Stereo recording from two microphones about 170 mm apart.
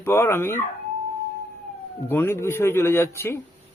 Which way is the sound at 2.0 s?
15° left (ahead or behind).